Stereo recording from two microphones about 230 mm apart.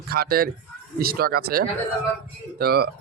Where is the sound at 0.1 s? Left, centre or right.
Right.